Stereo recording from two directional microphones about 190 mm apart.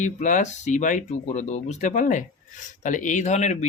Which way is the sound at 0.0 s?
40° left (ahead or behind).